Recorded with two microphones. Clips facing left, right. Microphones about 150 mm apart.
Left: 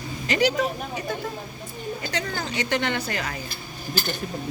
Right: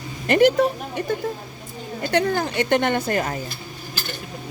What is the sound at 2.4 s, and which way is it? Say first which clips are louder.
Speech: right 6 dB; 55° right (ahead or behind).